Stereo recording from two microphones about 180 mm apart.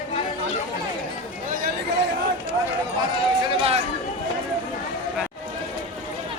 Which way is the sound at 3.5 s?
30° right (ahead or behind).